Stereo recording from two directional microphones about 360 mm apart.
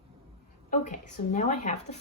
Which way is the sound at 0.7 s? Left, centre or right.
Centre.